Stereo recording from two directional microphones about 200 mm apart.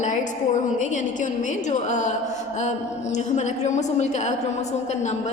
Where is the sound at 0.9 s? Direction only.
40° left (ahead or behind).